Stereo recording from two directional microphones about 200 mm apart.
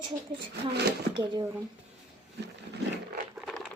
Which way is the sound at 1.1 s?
20° right (ahead or behind).